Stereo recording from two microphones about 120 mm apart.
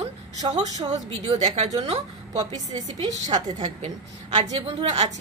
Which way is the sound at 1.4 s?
65° right (ahead or behind).